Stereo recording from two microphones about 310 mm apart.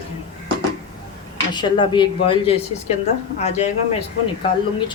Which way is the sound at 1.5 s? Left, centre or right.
Centre.